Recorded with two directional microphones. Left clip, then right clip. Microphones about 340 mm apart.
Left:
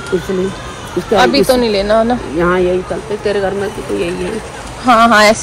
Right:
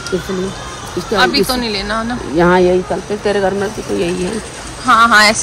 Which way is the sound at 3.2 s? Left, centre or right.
Right.